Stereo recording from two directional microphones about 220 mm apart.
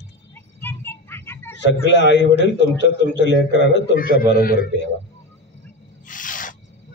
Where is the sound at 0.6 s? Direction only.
10° left (ahead or behind).